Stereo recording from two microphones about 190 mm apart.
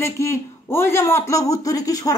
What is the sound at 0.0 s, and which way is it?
A man's voice, 15° left (ahead or behind).